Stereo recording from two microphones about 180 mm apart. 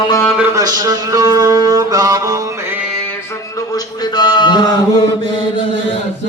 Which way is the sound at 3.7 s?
20° left (ahead or behind).